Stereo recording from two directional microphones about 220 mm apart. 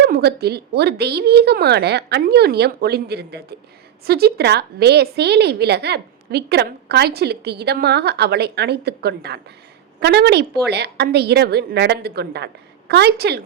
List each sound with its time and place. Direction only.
0.0 s a woman's voice: 45° right (ahead or behind)